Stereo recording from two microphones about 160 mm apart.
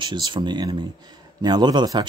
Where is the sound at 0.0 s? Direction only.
30° right (ahead or behind).